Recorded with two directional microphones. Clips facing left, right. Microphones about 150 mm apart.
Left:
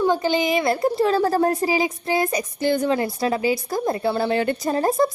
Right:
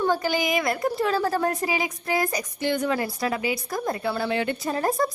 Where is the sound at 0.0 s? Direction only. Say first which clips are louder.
Left 4 dB; 20° left (ahead or behind).